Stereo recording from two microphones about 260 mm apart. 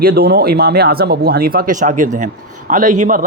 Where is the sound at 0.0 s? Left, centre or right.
Right.